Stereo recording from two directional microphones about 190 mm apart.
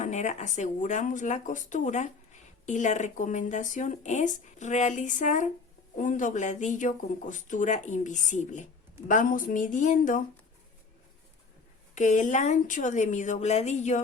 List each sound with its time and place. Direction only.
0.0 s a woman's voice: 40° left (ahead or behind)
11.9 s speech: 40° left (ahead or behind)